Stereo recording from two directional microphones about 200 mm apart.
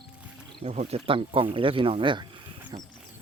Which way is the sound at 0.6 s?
30° right (ahead or behind).